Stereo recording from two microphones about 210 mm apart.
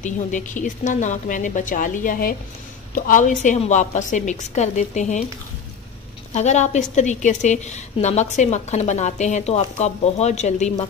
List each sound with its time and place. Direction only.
0.0 s a woman's voice: 35° left (ahead or behind)
6.3 s a woman's voice: 35° left (ahead or behind)